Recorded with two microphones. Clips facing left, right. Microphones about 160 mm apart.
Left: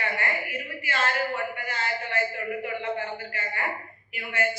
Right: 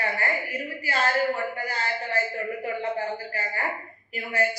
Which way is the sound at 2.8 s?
35° right (ahead or behind).